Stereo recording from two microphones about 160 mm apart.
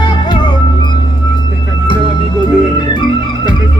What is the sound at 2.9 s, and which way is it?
Organ, 25° left (ahead or behind).